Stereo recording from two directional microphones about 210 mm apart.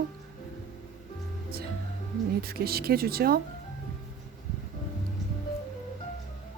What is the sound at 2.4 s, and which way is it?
Speech, 45° right (ahead or behind).